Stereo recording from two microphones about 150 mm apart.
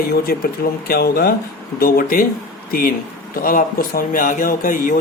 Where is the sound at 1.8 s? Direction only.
80° left.